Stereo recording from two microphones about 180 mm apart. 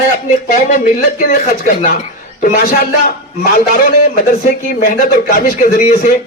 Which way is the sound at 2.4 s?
50° left (ahead or behind).